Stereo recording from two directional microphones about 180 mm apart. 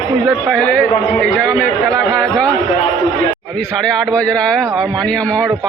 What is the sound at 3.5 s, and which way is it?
A man's voice, 5° left (ahead or behind).